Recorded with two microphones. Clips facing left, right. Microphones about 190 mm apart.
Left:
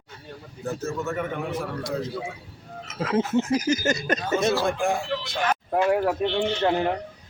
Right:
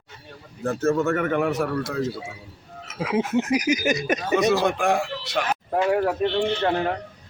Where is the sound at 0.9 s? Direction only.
70° right (ahead or behind).